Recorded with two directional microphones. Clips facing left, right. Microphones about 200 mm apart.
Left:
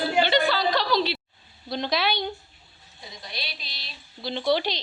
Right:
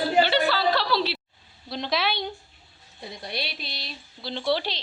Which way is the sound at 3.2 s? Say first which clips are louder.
Right 5 dB; 55° right (ahead or behind).